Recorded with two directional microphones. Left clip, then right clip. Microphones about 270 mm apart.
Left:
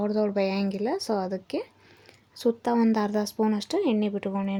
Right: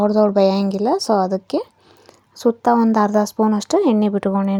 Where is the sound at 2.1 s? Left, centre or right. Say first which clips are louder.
Right 8 dB; centre.